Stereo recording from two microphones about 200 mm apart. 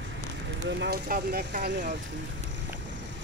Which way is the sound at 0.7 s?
55° right (ahead or behind).